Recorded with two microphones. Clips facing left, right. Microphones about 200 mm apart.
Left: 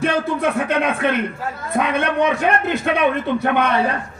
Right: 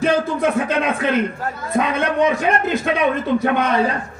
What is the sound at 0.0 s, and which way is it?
A man's voice, 65° left (ahead or behind).